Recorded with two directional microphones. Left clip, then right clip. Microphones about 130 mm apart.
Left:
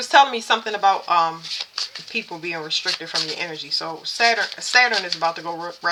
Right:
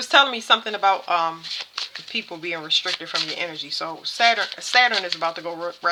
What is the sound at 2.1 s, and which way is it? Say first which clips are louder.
Speech: left 1 dB; 50° right (ahead or behind).